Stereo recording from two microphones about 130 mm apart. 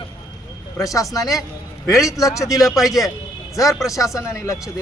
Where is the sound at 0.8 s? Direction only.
25° left (ahead or behind).